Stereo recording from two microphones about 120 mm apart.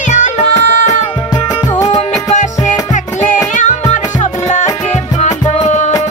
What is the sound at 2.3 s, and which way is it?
Music, 90° left.